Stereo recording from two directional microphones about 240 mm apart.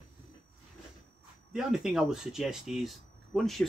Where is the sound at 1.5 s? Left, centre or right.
Centre.